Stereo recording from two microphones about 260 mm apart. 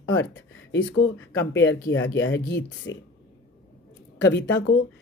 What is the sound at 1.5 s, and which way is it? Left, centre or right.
Speech, left.